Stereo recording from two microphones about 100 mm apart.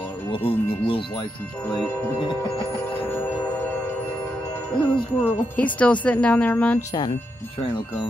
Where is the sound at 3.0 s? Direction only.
20° left (ahead or behind).